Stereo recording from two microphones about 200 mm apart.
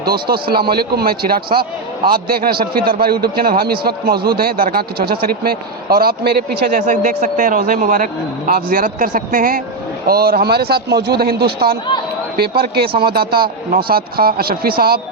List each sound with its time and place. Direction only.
0.0 s a man's voice: 50° right (ahead or behind)